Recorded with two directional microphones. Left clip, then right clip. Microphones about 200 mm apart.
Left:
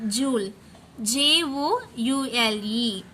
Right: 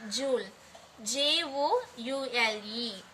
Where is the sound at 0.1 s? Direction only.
55° left (ahead or behind).